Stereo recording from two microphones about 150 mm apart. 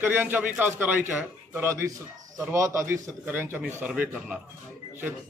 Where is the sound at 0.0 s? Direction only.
15° right (ahead or behind).